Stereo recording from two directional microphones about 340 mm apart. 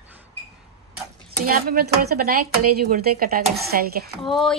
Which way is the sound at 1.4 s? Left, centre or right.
Right.